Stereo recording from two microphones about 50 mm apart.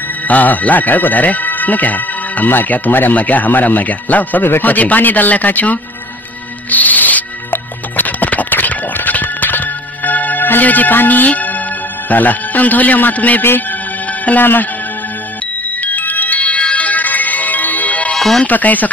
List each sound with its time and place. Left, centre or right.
0.3 s speech: left
6.7 s music: left
12.1 s speech: left
13.4 s speech: left
14.2 s speech: left
15.8 s music: left
18.1 s music: centre
18.4 s speech: left